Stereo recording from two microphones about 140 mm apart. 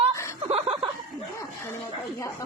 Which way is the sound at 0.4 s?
40° right (ahead or behind).